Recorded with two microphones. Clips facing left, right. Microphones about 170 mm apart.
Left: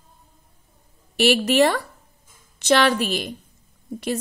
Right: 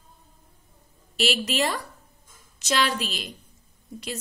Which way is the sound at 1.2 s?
60° left (ahead or behind).